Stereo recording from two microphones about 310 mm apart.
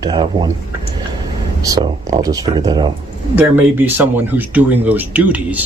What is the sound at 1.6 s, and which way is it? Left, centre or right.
Speech, centre.